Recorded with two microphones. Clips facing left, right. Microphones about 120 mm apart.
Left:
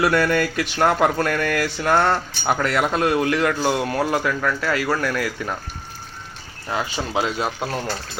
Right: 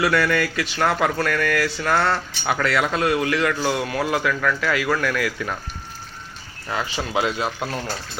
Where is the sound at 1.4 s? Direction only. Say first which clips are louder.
Even; 40° left (ahead or behind).